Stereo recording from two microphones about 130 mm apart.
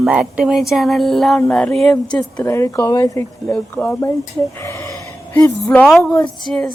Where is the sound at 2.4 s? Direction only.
20° left (ahead or behind).